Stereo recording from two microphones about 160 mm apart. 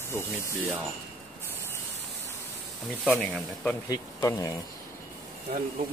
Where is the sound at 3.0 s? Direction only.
5° left (ahead or behind).